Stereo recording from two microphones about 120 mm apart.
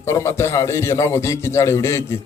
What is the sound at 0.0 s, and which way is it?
A man's voice, 20° left (ahead or behind).